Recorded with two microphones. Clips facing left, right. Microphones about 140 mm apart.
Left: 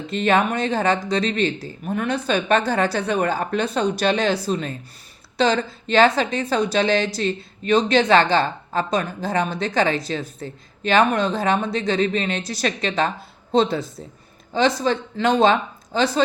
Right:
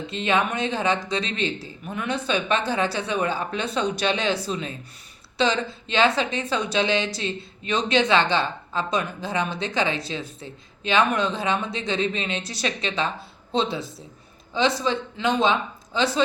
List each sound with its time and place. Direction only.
0.1 s a woman's voice: 45° left (ahead or behind)